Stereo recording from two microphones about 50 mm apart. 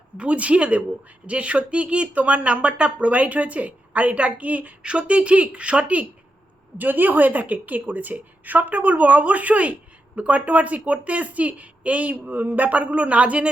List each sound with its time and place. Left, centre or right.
0.2 s speech: right
6.7 s a woman's voice: right